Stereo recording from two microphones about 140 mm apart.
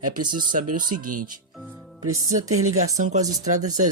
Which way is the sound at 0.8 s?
75° right (ahead or behind).